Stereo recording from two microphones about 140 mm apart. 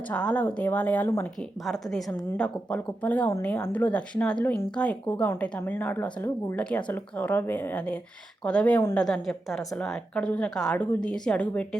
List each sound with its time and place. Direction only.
0.1 s a woman's voice: 10° left (ahead or behind)
1.6 s a woman's voice: centre (ahead or behind)